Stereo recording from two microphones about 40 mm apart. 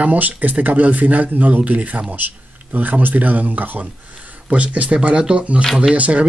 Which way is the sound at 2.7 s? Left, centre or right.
Right.